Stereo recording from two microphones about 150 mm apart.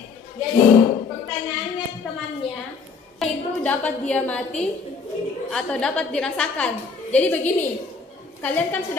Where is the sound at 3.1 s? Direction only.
10° left (ahead or behind).